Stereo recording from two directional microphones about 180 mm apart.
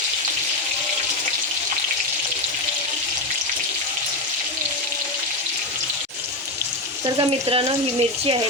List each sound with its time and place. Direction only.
7.2 s speech: 30° right (ahead or behind)